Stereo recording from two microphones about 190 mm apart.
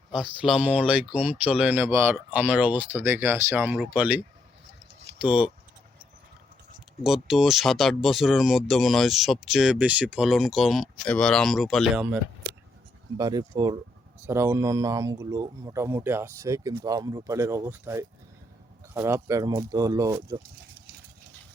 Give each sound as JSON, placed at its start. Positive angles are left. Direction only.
{"t": 0.1, "sound": "speech", "side_deg": -5}
{"t": 5.2, "sound": "speech", "side_deg": -5}
{"t": 7.0, "sound": "speech", "side_deg": 0}
{"t": 13.1, "sound": "speech", "side_deg": -20}